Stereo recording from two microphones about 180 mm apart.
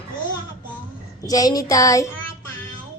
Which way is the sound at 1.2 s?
20° left (ahead or behind).